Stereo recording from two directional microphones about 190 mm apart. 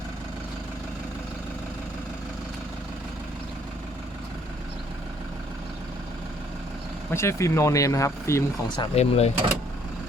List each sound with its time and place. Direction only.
7.1 s speech: 15° left (ahead or behind)
9.0 s speech: 35° left (ahead or behind)